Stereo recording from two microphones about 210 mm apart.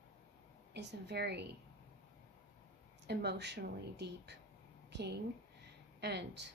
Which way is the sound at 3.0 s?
50° right (ahead or behind).